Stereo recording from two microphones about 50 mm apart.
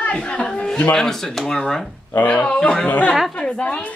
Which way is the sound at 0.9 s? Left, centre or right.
Centre.